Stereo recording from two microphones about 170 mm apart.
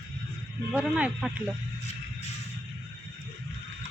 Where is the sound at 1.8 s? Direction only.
40° left (ahead or behind).